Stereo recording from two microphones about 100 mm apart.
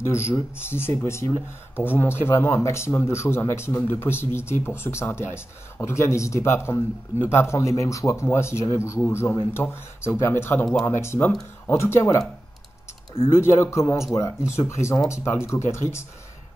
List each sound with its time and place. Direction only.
0.0 s speech: 25° left (ahead or behind)
13.4 s speech: 25° left (ahead or behind)